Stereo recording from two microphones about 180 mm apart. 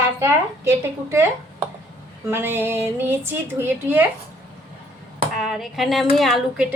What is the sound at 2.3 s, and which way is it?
A woman's voice, 10° right (ahead or behind).